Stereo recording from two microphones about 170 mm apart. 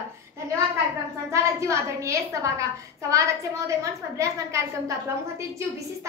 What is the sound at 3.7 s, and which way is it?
A woman's voice, 20° right (ahead or behind).